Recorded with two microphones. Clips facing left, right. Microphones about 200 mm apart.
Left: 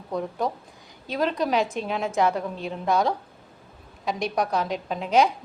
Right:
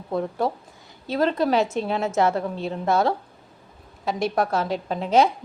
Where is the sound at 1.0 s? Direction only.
15° left (ahead or behind).